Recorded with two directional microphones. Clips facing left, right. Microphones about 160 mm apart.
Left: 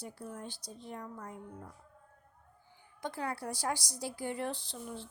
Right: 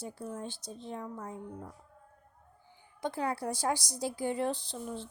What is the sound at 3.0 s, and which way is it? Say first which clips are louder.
A woman's voice: right 4 dB; 20° right (ahead or behind).